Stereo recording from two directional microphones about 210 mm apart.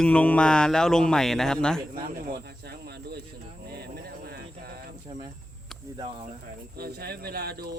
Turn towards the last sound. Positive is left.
turn(degrees=-50)  # may be behind; listen again after turning